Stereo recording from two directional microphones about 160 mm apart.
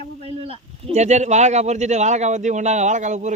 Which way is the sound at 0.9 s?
45° right (ahead or behind).